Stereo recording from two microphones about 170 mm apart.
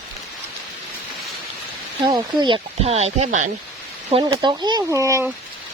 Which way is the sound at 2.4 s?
30° right (ahead or behind).